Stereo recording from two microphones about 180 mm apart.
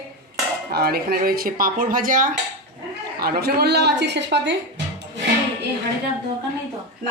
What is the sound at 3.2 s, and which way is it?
Speech, 60° right (ahead or behind).